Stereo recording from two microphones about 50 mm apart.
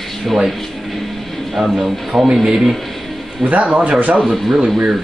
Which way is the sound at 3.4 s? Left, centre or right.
Right.